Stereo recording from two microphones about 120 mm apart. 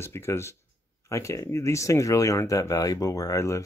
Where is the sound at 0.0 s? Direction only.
20° left (ahead or behind).